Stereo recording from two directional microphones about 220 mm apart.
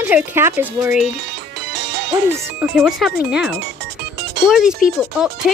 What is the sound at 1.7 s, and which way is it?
Music, 50° right (ahead or behind).